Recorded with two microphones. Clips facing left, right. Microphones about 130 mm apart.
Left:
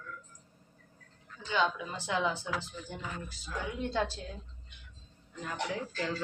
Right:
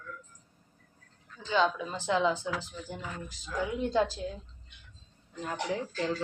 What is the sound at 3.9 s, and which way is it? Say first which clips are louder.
Music: right 4 dB; 15° right (ahead or behind).